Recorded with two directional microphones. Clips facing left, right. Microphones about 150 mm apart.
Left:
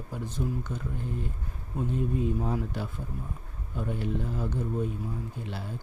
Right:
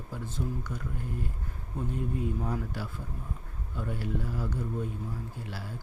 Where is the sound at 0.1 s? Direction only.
20° left (ahead or behind).